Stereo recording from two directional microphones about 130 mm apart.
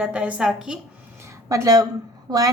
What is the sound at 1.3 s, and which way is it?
A woman's voice, 25° right (ahead or behind).